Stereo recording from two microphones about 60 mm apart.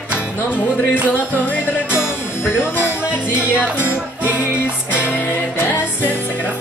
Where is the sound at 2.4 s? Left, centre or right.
Left.